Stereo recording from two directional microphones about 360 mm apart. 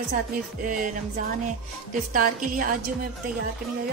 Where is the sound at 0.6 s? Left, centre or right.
Right.